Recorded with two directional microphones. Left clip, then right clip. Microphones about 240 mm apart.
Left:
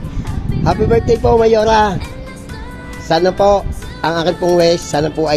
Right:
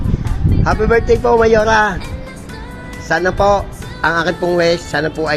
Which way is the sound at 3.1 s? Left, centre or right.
Left.